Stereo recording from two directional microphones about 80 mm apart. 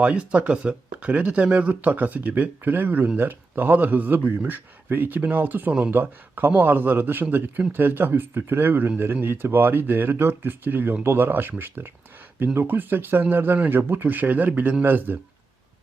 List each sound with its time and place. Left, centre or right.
0.0 s speech: centre